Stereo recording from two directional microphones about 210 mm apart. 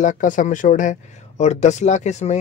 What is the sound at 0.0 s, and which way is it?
Speech, 35° left (ahead or behind).